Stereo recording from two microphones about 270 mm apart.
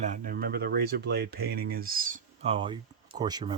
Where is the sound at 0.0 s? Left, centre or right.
Right.